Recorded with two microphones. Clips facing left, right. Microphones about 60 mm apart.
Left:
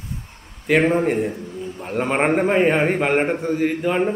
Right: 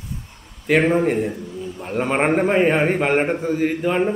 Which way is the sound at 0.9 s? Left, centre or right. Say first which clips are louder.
Right 1 dB; centre.